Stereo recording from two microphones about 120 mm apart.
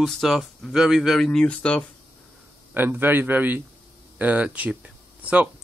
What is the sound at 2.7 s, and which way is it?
Speech, 15° right (ahead or behind).